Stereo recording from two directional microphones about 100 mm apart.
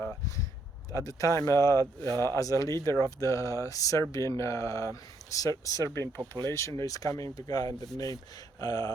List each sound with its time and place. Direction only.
0.9 s speech: 35° left (ahead or behind)